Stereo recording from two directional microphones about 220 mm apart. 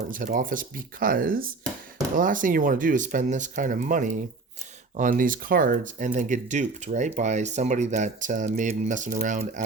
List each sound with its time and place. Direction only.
0.1 s speech: 40° right (ahead or behind)